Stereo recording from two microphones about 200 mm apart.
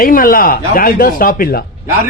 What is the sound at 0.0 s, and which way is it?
A man's voice, 45° left (ahead or behind).